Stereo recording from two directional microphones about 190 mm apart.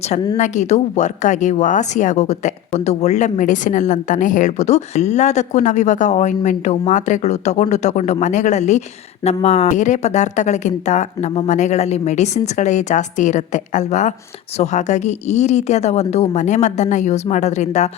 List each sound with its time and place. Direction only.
0.3 s speech: 40° left (ahead or behind)